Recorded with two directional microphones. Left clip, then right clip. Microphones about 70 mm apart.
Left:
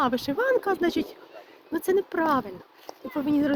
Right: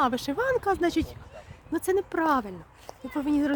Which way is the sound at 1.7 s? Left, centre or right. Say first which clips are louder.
Left 2 dB; right.